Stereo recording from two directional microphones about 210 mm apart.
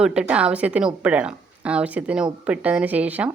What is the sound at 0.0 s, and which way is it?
Speech, 5° right (ahead or behind).